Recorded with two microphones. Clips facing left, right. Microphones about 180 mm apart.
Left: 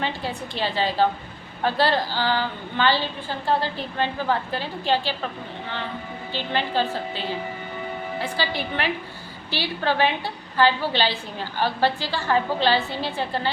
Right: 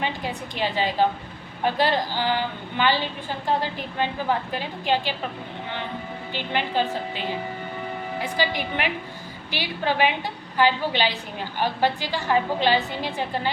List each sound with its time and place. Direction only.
0.0 s a woman's voice: 15° right (ahead or behind)
6.3 s a woman's voice: 15° right (ahead or behind)
8.2 s a woman's voice: 15° right (ahead or behind)